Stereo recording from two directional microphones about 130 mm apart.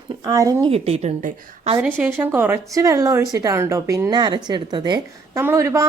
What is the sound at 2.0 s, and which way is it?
Speech, 15° right (ahead or behind).